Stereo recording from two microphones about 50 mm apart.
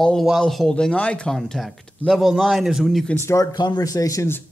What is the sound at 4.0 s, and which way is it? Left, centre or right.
Speech, left.